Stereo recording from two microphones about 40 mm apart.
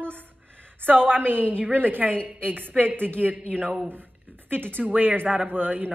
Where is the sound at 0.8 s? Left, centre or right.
Right.